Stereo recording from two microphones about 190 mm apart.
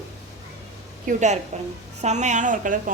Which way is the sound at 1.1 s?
40° right (ahead or behind).